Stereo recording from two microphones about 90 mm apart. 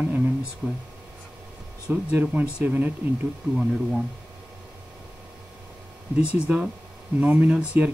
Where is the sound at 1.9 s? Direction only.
20° right (ahead or behind).